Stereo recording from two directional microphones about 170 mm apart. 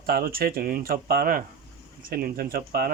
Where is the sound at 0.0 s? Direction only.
60° right (ahead or behind).